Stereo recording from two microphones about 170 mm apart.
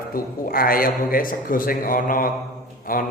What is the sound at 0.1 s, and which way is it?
A man's voice, 60° left (ahead or behind).